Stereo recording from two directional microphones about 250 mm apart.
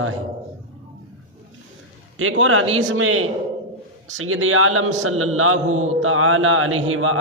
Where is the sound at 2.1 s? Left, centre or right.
Right.